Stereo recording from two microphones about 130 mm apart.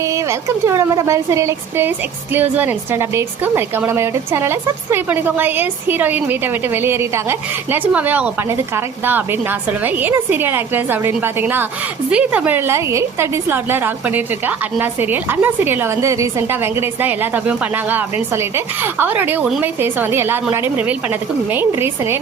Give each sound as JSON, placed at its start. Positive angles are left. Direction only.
{"t": 0.0, "sound": "a woman's voice", "side_deg": -25}
{"t": 19.8, "sound": "a woman's voice", "side_deg": -15}